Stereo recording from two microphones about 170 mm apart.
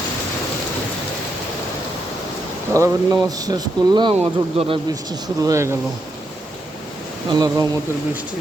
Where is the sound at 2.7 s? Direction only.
20° right (ahead or behind).